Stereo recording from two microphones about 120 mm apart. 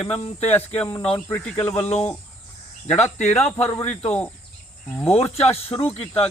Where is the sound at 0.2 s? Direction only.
60° left (ahead or behind).